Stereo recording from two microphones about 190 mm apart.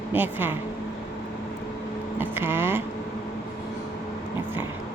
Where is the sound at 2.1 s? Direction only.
10° right (ahead or behind).